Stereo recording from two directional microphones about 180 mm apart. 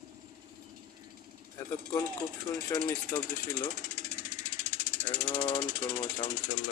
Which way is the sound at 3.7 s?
45° right (ahead or behind).